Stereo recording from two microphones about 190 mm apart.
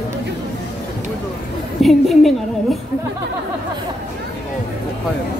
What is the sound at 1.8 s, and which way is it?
A woman's voice, centre (ahead or behind).